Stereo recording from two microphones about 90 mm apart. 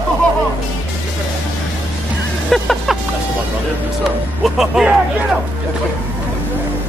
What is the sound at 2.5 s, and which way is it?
Music, centre (ahead or behind).